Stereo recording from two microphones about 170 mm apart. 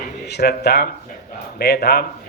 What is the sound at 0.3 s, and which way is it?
A man's voice, 75° left (ahead or behind).